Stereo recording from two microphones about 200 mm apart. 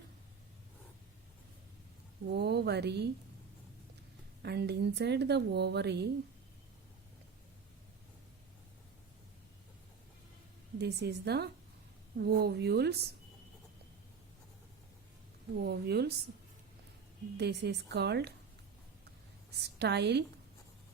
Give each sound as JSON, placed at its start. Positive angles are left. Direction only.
{"t": 2.3, "sound": "speech", "side_deg": -55}
{"t": 4.4, "sound": "speech", "side_deg": -55}
{"t": 10.8, "sound": "speech", "side_deg": -55}
{"t": 15.6, "sound": "speech", "side_deg": -55}
{"t": 17.3, "sound": "speech", "side_deg": -55}
{"t": 19.6, "sound": "speech", "side_deg": -55}